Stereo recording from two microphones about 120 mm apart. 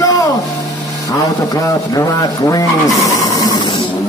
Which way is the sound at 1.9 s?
30° left (ahead or behind).